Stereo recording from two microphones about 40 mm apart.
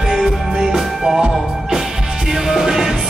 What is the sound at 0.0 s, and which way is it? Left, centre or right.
Music, centre.